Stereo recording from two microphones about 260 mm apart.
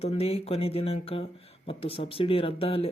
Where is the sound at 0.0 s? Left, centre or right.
Left.